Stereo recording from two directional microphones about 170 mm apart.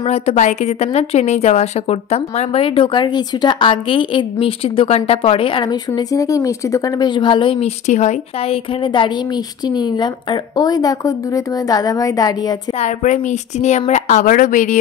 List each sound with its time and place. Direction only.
0.0 s a woman's voice: 40° left (ahead or behind)
7.8 s a woman's voice: 45° left (ahead or behind)
8.8 s a woman's voice: 30° left (ahead or behind)
12.8 s a woman's voice: 45° left (ahead or behind)